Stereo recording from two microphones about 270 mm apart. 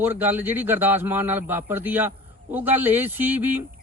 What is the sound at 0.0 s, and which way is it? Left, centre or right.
A man's voice, centre.